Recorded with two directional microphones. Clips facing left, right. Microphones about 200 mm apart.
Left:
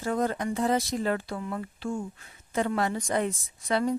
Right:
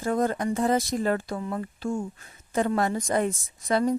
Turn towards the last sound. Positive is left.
turn(degrees=-45)  # may be behind; listen again after turning